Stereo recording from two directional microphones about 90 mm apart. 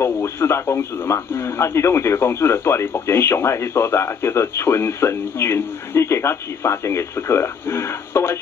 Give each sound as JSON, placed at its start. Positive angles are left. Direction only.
{"t": 0.0, "sound": "speech", "side_deg": 30}